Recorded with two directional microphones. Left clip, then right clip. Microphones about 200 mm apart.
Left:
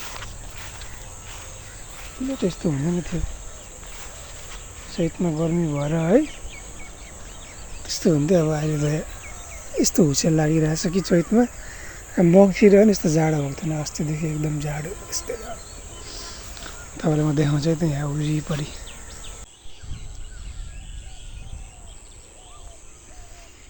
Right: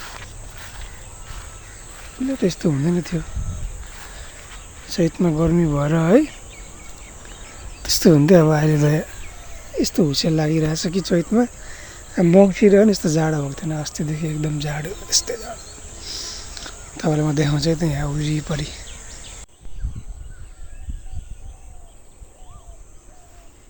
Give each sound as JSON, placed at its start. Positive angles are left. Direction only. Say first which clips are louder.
{"t": 0.0, "sound": "walk", "louder": "even", "side_deg": 0}
{"t": 2.4, "sound": "speech", "louder": "right 4 dB", "side_deg": -50}
{"t": 4.9, "sound": "speech", "louder": "right 5 dB", "side_deg": -55}
{"t": 7.8, "sound": "speech", "louder": "right 6 dB", "side_deg": -60}
{"t": 9.7, "sound": "speech", "louder": "even", "side_deg": 0}
{"t": 14.8, "sound": "speech", "louder": "right 8 dB", "side_deg": -25}
{"t": 16.0, "sound": "a sound", "louder": "right 7 dB", "side_deg": -10}